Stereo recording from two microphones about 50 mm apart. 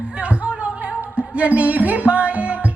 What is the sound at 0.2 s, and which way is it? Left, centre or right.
Music, right.